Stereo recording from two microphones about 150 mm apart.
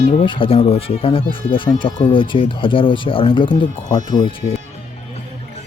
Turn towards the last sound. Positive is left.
turn(degrees=35)  # may be behind; listen again after turning